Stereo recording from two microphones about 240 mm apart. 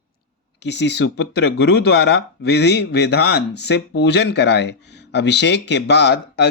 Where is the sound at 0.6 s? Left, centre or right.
Left.